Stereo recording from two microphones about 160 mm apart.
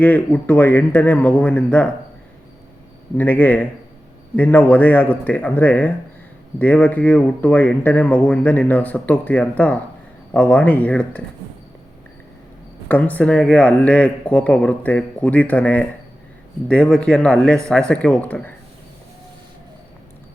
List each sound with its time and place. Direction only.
0.0 s speech: 10° left (ahead or behind)
3.2 s speech: 10° left (ahead or behind)
12.9 s speech: 10° left (ahead or behind)